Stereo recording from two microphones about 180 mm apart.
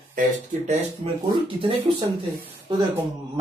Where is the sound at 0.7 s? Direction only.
35° right (ahead or behind).